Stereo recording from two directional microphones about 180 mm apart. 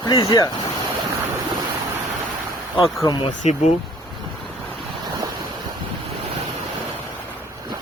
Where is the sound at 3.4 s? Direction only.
40° left (ahead or behind).